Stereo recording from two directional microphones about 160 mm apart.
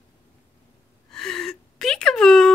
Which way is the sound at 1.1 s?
5° left (ahead or behind).